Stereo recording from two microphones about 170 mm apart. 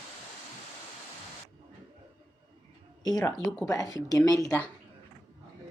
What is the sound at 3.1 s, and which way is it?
Speech, 20° left (ahead or behind).